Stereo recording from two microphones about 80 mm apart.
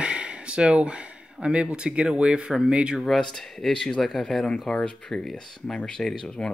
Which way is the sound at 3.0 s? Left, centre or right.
Centre.